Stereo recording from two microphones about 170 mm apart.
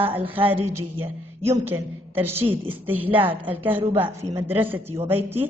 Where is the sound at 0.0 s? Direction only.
10° right (ahead or behind).